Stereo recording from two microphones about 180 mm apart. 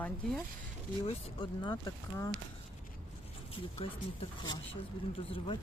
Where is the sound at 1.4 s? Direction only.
25° left (ahead or behind).